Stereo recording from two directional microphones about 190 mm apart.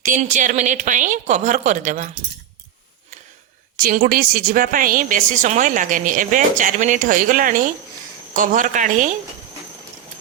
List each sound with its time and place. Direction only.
0.0 s a woman's voice: 40° right (ahead or behind)
3.8 s a woman's voice: 45° right (ahead or behind)